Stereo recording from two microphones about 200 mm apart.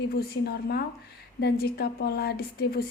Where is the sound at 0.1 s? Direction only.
50° left (ahead or behind).